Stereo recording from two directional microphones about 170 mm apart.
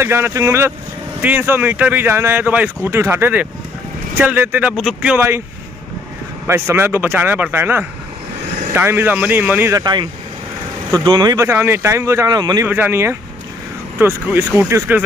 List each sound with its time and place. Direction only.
0.0 s speech: 15° right (ahead or behind)
6.4 s speech: 15° right (ahead or behind)
11.1 s speech: 25° right (ahead or behind)
12.6 s speech: 10° right (ahead or behind)